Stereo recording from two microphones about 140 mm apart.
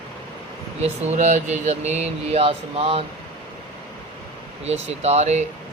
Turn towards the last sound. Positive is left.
turn(degrees=-55)  # may be behind; listen again after turning